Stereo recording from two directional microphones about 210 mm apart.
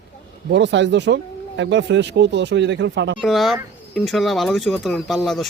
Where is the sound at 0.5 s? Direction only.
55° right (ahead or behind).